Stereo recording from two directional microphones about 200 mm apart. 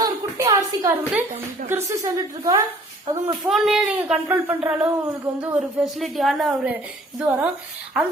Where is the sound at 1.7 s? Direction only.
15° right (ahead or behind).